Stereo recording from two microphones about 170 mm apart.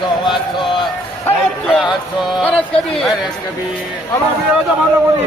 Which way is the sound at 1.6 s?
Centre (ahead or behind).